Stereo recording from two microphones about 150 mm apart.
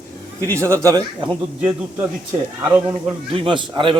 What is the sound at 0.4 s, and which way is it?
Speech, 20° right (ahead or behind).